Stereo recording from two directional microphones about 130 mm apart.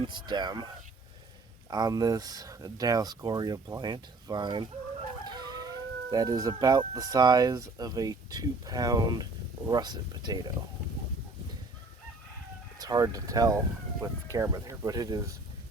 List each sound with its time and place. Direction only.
0.0 s speech: 35° right (ahead or behind)
1.7 s speech: 30° right (ahead or behind)
12.8 s speech: 30° right (ahead or behind)